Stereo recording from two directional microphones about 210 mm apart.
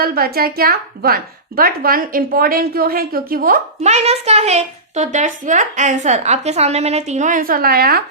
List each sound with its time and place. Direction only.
0.0 s a woman's voice: 45° right (ahead or behind)